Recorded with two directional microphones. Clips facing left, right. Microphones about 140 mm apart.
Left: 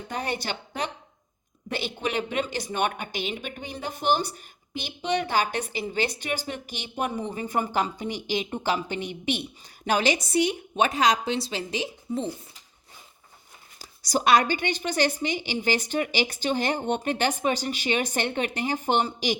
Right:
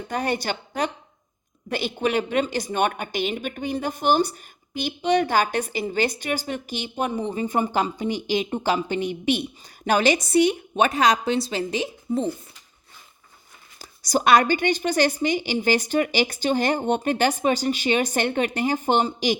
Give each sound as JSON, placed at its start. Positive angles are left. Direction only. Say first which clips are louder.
{"t": 0.1, "sound": "a woman's voice", "louder": "right 5 dB", "side_deg": -45}
{"t": 9.8, "sound": "speech", "louder": "right 4 dB", "side_deg": -50}
{"t": 13.7, "sound": "a woman's voice", "louder": "right 3 dB", "side_deg": -50}